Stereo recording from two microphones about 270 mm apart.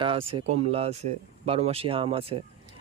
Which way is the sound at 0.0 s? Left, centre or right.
Centre.